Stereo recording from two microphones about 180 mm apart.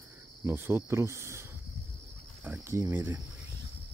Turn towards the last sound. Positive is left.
turn(degrees=-15)  # may be behind; listen again after turning